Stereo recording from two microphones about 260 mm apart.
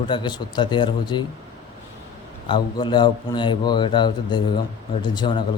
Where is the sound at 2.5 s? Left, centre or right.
Centre.